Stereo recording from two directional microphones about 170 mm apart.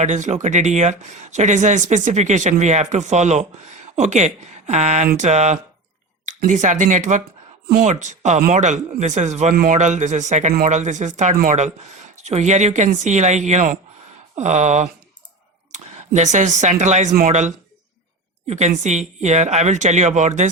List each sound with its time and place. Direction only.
0.0 s speech: 45° right (ahead or behind)